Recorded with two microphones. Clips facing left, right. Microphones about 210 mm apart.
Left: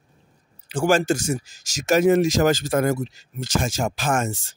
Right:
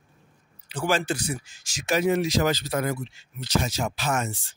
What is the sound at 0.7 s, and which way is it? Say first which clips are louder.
Speech: left 6 dB; 45° left (ahead or behind).